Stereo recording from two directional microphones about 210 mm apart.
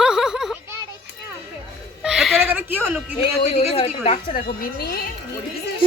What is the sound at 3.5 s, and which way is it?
Speech, 30° left (ahead or behind).